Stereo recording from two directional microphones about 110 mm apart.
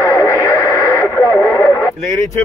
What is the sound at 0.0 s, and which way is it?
Radio, 20° left (ahead or behind).